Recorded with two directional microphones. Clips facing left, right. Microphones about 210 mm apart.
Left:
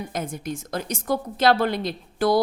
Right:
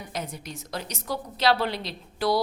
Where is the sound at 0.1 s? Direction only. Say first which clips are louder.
Left 6 dB; 50° left (ahead or behind).